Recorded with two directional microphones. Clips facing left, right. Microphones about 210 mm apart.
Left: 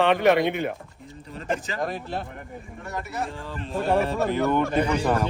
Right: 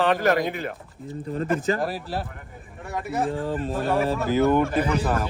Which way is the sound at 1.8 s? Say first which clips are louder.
Right 1 dB; 5° right (ahead or behind).